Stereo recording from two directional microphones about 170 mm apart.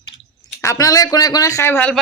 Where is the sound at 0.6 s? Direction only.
20° left (ahead or behind).